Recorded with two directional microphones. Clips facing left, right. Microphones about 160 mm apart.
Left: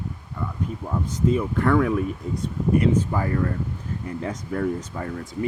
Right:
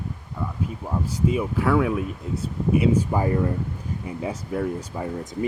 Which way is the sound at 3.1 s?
20° right (ahead or behind).